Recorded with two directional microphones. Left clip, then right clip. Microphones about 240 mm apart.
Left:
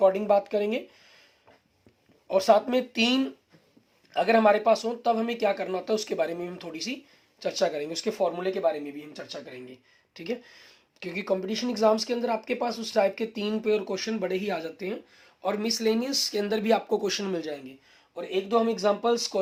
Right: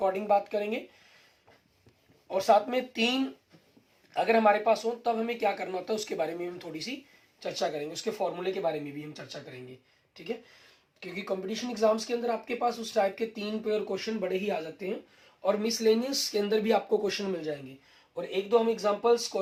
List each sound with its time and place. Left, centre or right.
0.0 s speech: left
2.3 s speech: left
11.0 s speech: left